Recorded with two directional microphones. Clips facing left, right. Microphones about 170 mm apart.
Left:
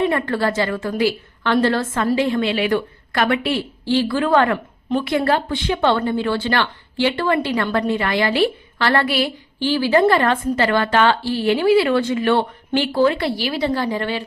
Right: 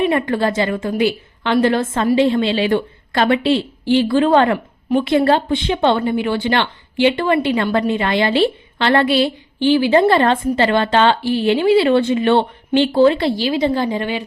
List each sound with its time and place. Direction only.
0.0 s speech: 20° right (ahead or behind)